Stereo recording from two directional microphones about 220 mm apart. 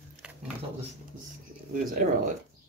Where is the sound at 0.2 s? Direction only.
5° right (ahead or behind).